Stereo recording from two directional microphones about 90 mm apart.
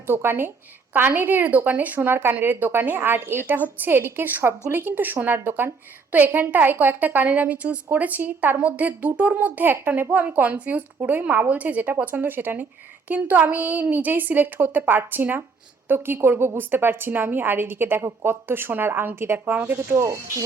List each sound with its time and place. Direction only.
0.1 s a woman's voice: 25° right (ahead or behind)